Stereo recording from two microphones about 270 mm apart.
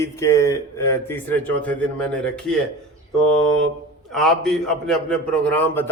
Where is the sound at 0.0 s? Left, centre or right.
Centre.